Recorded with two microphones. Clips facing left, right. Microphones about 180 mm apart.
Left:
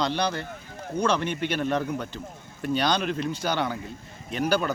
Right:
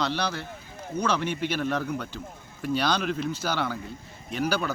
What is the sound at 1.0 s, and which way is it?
Speech, 10° right (ahead or behind).